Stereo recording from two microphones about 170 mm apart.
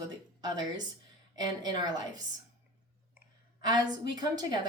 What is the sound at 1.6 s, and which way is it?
Speech, 25° right (ahead or behind).